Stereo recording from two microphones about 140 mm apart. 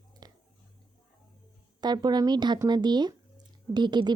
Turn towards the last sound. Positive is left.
turn(degrees=-30)  # may be behind; listen again after turning